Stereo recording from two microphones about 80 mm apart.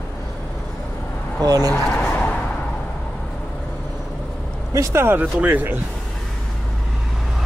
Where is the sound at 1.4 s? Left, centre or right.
Right.